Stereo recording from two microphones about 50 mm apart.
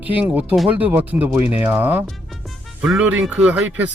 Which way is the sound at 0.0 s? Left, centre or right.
Right.